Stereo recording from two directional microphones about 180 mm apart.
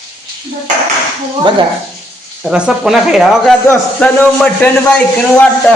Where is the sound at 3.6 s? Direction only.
10° left (ahead or behind).